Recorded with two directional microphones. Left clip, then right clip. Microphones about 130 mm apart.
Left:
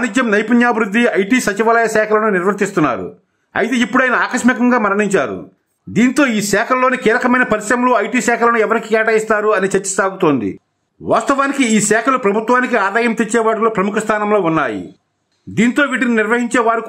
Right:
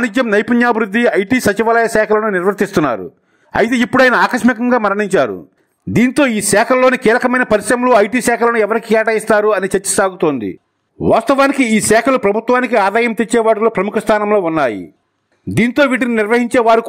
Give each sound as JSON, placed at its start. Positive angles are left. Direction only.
{"t": 0.0, "sound": "a man's voice", "side_deg": -50}